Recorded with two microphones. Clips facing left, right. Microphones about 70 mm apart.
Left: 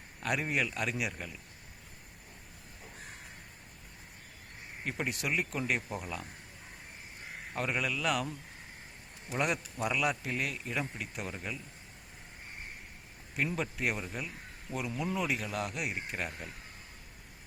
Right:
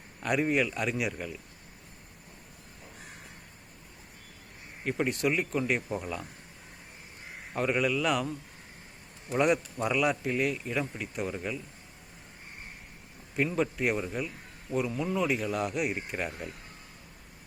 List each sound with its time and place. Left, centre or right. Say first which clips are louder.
0.2 s a man's voice: right 5 dB; centre
4.9 s a man's voice: right 6 dB; centre
7.5 s a man's voice: right 6 dB; centre
9.3 s a man's voice: right 7 dB; centre
13.3 s a man's voice: right 6 dB; centre